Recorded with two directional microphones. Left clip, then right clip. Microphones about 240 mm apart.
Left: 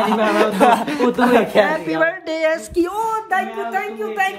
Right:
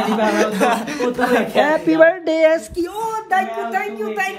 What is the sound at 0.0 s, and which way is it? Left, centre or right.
A man's voice, left.